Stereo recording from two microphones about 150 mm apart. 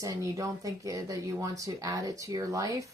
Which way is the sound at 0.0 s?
25° right (ahead or behind).